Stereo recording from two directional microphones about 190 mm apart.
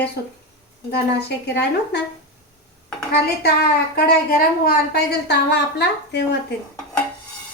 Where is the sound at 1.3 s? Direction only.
60° left (ahead or behind).